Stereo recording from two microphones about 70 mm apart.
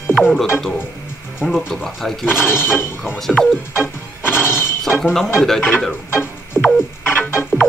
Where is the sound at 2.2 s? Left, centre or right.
Left.